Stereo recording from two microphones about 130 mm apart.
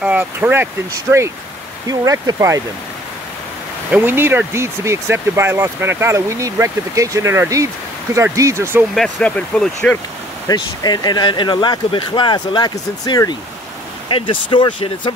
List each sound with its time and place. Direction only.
0.0 s speech: 10° right (ahead or behind)
1.9 s speech: 25° right (ahead or behind)
3.9 s speech: 15° right (ahead or behind)
8.9 s speech: 5° left (ahead or behind)
10.5 s speech: 30° left (ahead or behind)